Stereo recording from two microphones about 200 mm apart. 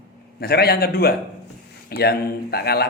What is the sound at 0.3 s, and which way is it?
Speech, 50° left (ahead or behind).